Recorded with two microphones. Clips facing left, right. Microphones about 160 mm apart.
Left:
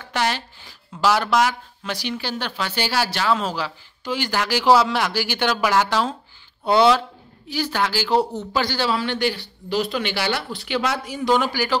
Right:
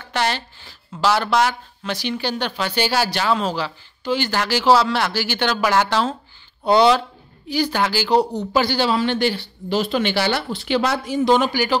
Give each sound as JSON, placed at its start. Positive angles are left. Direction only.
{"t": 0.0, "sound": "a woman's voice", "side_deg": 10}
{"t": 8.5, "sound": "a man's voice", "side_deg": -10}
{"t": 8.8, "sound": "speech", "side_deg": -25}